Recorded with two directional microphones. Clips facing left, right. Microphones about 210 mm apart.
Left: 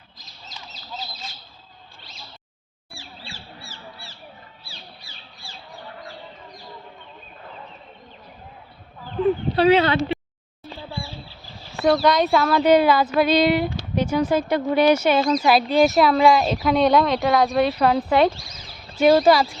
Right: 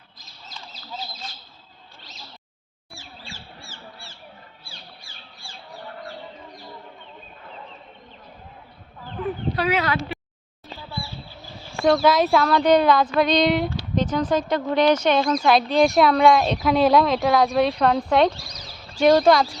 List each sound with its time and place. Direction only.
2.9 s bird: 45° right (ahead or behind)
4.6 s crow: 50° right (ahead or behind)
9.2 s speech: 30° left (ahead or behind)
11.7 s a sound: 5° left (ahead or behind)
12.0 s speech: centre (ahead or behind)
18.4 s a sound: 40° right (ahead or behind)
18.9 s speech: 5° left (ahead or behind)